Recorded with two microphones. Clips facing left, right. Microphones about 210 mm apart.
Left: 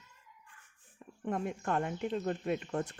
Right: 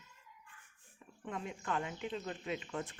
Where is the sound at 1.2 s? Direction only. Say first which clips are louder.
Left 6 dB; 50° left (ahead or behind).